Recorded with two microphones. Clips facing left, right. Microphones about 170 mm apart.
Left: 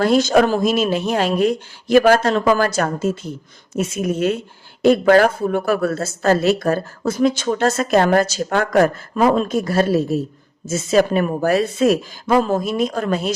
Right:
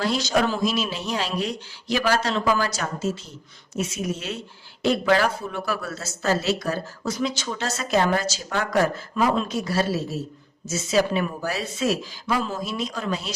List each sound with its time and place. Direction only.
0.0 s speech: 55° left (ahead or behind)